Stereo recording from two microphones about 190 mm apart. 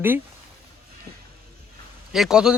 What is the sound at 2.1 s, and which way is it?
Speech, centre (ahead or behind).